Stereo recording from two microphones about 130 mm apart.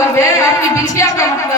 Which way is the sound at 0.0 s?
25° left (ahead or behind).